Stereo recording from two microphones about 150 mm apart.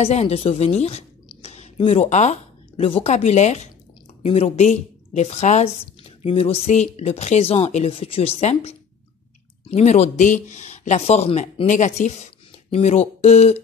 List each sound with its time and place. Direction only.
0.0 s speech: 45° left (ahead or behind)
1.3 s a sound: 45° left (ahead or behind)
1.8 s speech: 40° left (ahead or behind)